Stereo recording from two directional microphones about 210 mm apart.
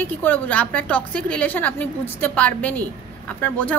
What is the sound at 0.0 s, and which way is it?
A woman's voice, 10° left (ahead or behind).